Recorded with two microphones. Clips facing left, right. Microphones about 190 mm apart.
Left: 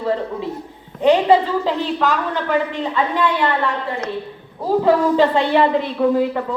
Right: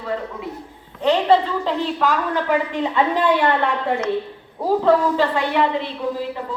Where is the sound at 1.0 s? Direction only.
15° left (ahead or behind).